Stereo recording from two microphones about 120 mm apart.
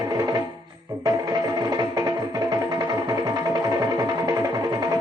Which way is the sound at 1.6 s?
30° right (ahead or behind).